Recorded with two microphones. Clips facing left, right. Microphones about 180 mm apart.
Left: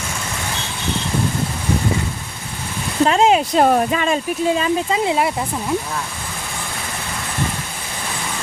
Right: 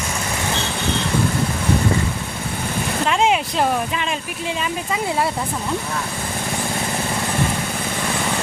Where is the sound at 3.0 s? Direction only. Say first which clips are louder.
Left 4 dB; 35° left (ahead or behind).